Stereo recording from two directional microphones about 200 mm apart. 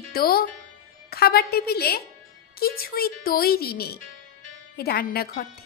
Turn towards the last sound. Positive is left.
turn(degrees=50)  # may be behind; listen again after turning